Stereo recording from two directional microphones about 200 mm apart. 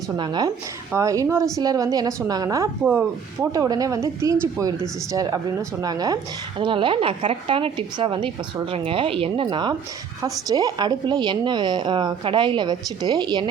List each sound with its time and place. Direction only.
0.2 s a woman's voice: 20° right (ahead or behind)